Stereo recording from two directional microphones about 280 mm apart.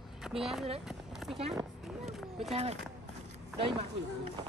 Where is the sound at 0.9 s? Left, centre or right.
Centre.